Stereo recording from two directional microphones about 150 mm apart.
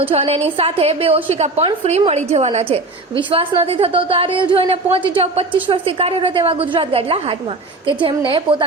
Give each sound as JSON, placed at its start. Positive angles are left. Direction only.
{"t": 0.0, "sound": "a woman's voice", "side_deg": -40}